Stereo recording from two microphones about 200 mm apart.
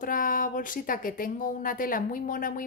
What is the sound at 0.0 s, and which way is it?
Speech, 45° left (ahead or behind).